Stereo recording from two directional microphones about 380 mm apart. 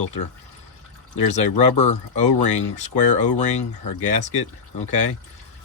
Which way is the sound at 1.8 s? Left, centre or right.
Centre.